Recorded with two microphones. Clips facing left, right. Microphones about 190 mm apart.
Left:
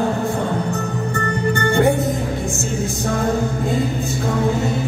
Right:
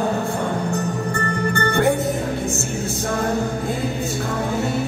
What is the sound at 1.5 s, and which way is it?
Music, 15° left (ahead or behind).